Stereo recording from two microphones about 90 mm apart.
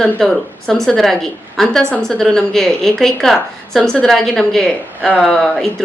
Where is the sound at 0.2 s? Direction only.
5° left (ahead or behind).